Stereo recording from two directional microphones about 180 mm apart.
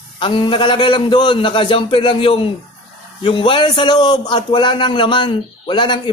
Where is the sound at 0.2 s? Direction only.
30° left (ahead or behind).